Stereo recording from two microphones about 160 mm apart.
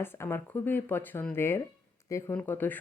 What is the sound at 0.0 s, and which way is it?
Speech, 15° left (ahead or behind).